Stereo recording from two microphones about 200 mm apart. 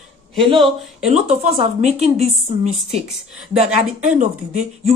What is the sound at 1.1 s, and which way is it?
Speech, 35° right (ahead or behind).